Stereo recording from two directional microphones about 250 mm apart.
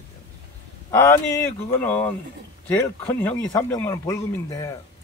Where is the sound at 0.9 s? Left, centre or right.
Centre.